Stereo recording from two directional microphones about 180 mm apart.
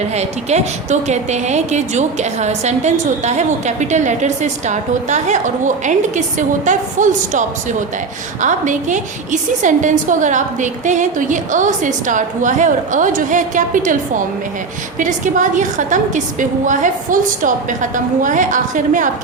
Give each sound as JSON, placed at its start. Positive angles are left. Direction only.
{"t": 0.1, "sound": "a woman's voice", "side_deg": -40}
{"t": 14.9, "sound": "a woman's voice", "side_deg": -45}